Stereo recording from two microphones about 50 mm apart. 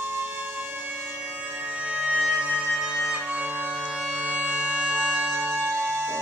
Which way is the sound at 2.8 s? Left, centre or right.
Centre.